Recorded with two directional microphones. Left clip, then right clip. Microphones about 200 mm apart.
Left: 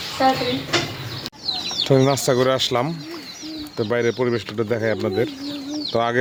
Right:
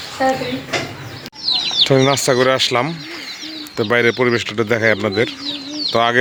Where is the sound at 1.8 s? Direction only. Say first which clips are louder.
Left 1 dB; centre (ahead or behind).